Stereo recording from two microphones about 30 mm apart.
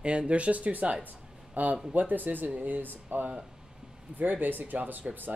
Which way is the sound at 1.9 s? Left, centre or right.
Right.